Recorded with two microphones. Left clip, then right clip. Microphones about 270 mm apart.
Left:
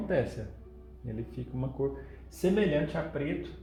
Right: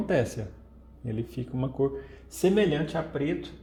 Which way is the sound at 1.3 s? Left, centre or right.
Right.